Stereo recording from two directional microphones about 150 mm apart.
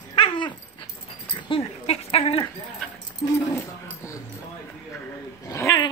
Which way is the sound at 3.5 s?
15° left (ahead or behind).